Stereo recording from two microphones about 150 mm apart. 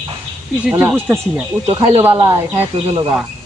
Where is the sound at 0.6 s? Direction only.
10° right (ahead or behind).